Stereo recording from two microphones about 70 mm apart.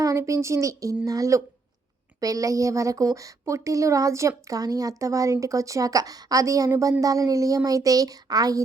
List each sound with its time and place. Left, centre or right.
0.0 s a woman's voice: right